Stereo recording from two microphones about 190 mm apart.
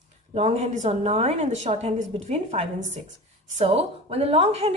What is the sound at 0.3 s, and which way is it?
A woman's voice, 35° right (ahead or behind).